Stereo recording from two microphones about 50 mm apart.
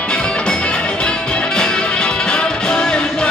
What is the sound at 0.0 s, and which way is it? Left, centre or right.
Music, left.